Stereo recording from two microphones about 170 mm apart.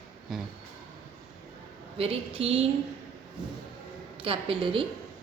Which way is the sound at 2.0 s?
35° right (ahead or behind).